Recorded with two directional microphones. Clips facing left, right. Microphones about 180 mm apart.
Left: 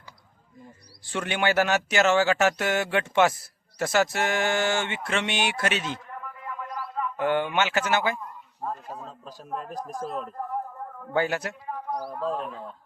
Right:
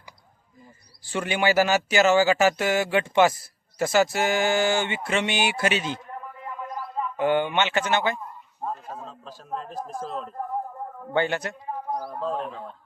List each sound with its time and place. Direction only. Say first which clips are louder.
0.6 s speech: left 3 dB; centre (ahead or behind)
6.4 s a sound: right 1 dB; 25° right (ahead or behind)
7.2 s speech: right 2 dB; centre (ahead or behind)
8.6 s speech: right 1 dB; 15° right (ahead or behind)
9.0 s speech: right 1 dB; centre (ahead or behind)
11.7 s a sound: right 2 dB; 20° right (ahead or behind)
12.3 s speech: right 1 dB; centre (ahead or behind)